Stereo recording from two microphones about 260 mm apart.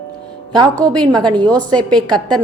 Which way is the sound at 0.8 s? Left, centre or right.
Centre.